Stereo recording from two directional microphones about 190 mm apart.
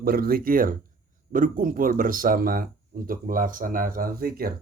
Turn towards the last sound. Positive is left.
turn(degrees=-50)  # may be behind; listen again after turning